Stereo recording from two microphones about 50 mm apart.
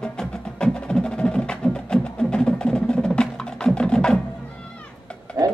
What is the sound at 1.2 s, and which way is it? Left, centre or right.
Wood block, centre.